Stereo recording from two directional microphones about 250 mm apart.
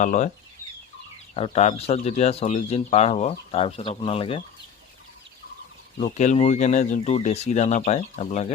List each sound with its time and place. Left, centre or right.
0.0 s speech: left
1.3 s speech: left
6.0 s speech: left